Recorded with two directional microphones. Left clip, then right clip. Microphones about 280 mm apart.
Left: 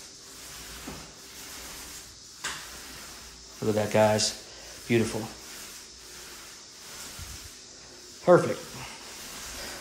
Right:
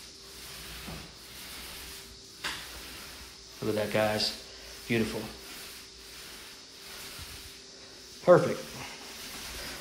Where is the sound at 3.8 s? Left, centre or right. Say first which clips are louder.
Left 6 dB; centre.